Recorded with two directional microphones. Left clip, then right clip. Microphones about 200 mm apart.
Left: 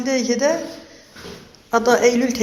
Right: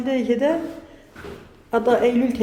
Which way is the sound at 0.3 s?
20° right (ahead or behind).